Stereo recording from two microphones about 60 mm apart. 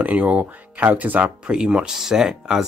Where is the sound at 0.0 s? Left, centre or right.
Right.